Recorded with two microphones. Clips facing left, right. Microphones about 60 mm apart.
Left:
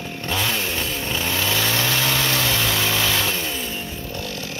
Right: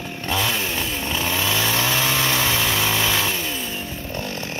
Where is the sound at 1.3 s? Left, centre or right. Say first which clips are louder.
Even; centre.